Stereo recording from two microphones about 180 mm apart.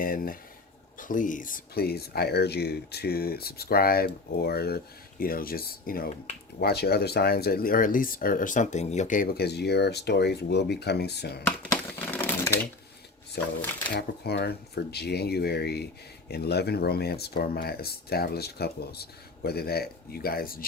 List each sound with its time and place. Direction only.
0.0 s speech: 50° left (ahead or behind)
11.7 s typewriter: 10° left (ahead or behind)
13.9 s speech: 65° left (ahead or behind)